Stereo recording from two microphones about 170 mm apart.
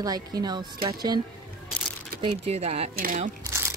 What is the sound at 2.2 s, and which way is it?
Speech, 40° right (ahead or behind).